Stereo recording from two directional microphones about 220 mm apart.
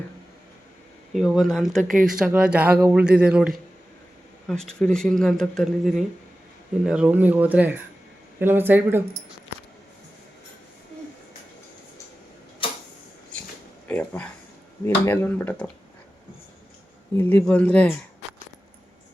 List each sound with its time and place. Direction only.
1.1 s speech: centre (ahead or behind)
1.8 s speech: 35° right (ahead or behind)
2.0 s speech: 5° right (ahead or behind)
12.6 s tick-tock: 25° left (ahead or behind)
13.8 s speech: 5° left (ahead or behind)
17.2 s speech: 10° left (ahead or behind)